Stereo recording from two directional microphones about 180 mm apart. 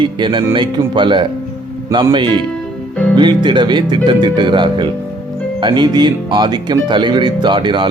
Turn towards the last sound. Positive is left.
turn(degrees=-25)  # may be behind; listen again after turning